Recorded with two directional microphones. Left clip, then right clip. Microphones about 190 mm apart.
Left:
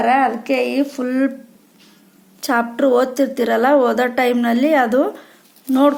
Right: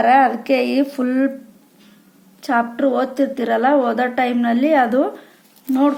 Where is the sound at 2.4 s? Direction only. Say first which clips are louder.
Left 1 dB; 20° left (ahead or behind).